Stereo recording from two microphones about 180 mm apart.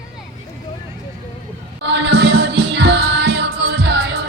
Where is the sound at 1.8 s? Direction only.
75° right (ahead or behind).